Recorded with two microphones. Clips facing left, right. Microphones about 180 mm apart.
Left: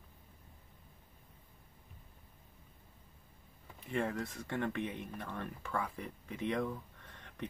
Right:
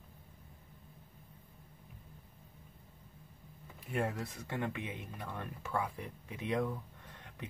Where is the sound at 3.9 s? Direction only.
5° right (ahead or behind).